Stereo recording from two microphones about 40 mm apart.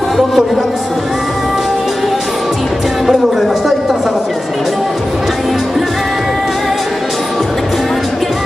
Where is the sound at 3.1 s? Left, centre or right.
Centre.